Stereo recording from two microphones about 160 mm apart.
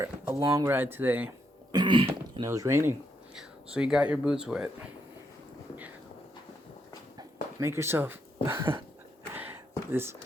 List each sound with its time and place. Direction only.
0.0 s speech: 20° right (ahead or behind)
1.7 s throat clearing: 30° right (ahead or behind)
2.4 s speech: 20° right (ahead or behind)
3.3 s speech: 5° right (ahead or behind)
7.6 s speech: 15° right (ahead or behind)
9.3 s a sound: 10° right (ahead or behind)